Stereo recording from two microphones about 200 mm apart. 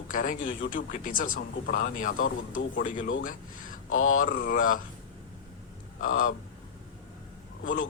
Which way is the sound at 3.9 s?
90° left.